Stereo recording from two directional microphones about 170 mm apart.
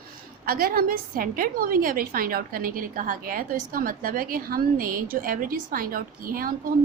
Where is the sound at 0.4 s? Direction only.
60° right (ahead or behind).